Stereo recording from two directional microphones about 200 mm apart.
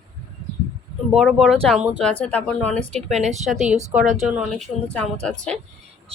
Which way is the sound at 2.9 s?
35° right (ahead or behind).